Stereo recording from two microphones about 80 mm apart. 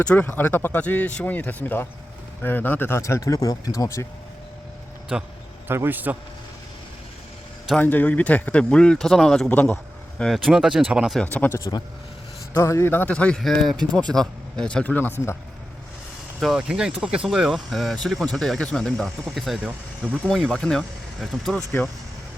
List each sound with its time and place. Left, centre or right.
0.2 s speech: left
3.0 s speech: left
5.1 s speech: centre
5.6 s a man's voice: right
7.8 s speech: left; by 9.5 s centre
9.5 s speech: centre
10.2 s speech: centre
10.4 s speech: centre
11.3 s speech: left
12.5 s a man's voice: left
13.1 s speech: centre
13.4 s speech: centre
14.9 s speech: left
16.4 s speech: centre